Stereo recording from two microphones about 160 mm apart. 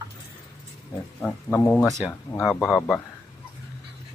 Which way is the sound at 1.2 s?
10° left (ahead or behind).